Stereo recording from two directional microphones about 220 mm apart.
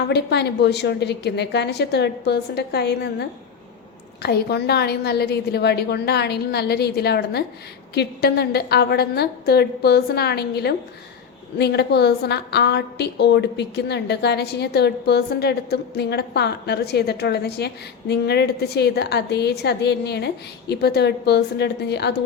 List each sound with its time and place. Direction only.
0.1 s a woman's voice: 50° left (ahead or behind)